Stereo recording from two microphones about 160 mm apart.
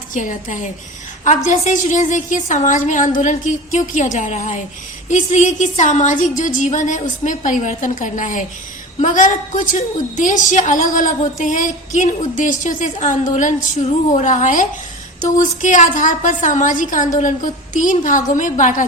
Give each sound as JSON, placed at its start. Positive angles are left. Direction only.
{"t": 0.1, "sound": "a woman's voice", "side_deg": 55}